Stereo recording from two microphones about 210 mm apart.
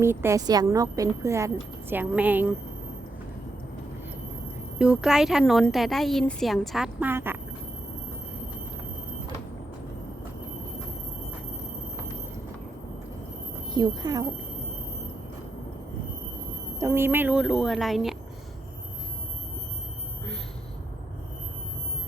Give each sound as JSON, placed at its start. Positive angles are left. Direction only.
{"t": 0.0, "sound": "a woman's voice", "side_deg": -10}
{"t": 4.8, "sound": "a woman's voice", "side_deg": -5}
{"t": 13.7, "sound": "a woman's voice", "side_deg": -20}
{"t": 16.8, "sound": "a woman's voice", "side_deg": -10}